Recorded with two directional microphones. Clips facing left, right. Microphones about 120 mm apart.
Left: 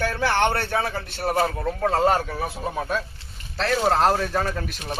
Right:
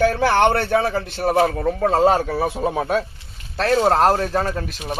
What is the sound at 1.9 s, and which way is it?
Speech, 20° right (ahead or behind).